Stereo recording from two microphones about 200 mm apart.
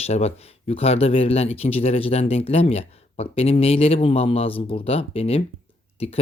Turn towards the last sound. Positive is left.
turn(degrees=30)  # may be behind; listen again after turning